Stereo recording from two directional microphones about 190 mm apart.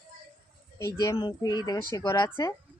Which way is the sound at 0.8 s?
15° left (ahead or behind).